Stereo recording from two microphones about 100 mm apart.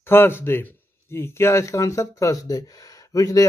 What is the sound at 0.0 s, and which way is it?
A man's voice, 25° left (ahead or behind).